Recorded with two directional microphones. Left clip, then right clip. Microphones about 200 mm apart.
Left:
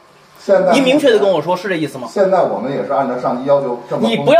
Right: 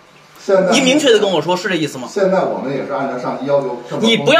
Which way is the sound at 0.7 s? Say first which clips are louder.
Left 1 dB; 40° left (ahead or behind).